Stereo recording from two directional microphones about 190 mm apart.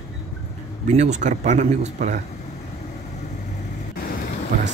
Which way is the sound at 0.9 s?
35° right (ahead or behind).